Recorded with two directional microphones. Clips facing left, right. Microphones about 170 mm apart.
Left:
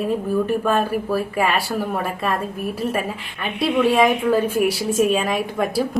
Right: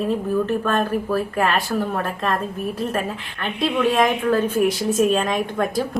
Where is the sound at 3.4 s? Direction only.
10° left (ahead or behind).